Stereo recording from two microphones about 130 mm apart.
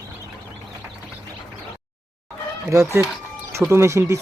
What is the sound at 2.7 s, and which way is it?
Speech, 20° right (ahead or behind).